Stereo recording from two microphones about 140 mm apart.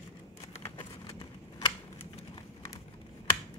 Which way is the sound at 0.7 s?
35° left (ahead or behind).